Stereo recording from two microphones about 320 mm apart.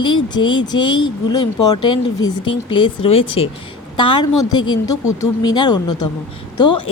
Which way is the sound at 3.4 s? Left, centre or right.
Centre.